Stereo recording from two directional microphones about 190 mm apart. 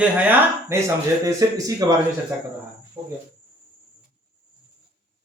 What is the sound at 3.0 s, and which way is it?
Speech, 25° right (ahead or behind).